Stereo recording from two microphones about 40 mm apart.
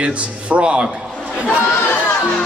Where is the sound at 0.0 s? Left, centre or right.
Right.